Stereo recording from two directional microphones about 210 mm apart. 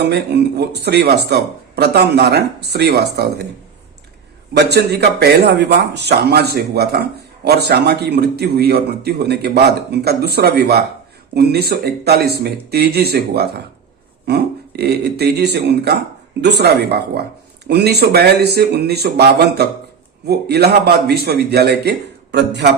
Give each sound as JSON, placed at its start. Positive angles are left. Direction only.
{"t": 0.0, "sound": "speech", "side_deg": -50}
{"t": 4.5, "sound": "speech", "side_deg": -50}